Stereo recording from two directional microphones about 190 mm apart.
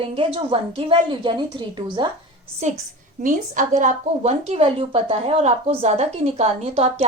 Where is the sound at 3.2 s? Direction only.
45° right (ahead or behind).